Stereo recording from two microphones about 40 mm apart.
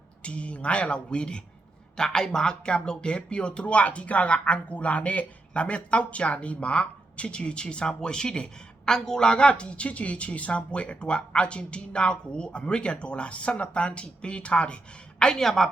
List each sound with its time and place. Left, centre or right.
0.2 s speech: left
2.0 s speech: centre; by 14.8 s left
15.4 s a woman's voice: centre